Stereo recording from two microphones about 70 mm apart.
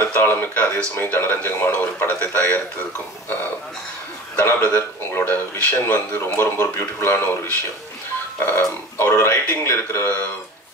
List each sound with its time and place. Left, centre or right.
0.0 s speech: left
4.6 s speech: left
8.5 s speech: left